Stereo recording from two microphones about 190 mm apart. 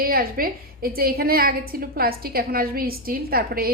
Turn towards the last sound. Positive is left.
turn(degrees=-50)  # may be behind; listen again after turning